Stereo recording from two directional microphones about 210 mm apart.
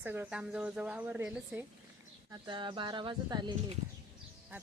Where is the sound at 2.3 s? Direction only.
20° right (ahead or behind).